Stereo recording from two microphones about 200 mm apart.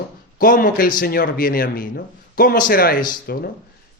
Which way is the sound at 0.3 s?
40° left (ahead or behind).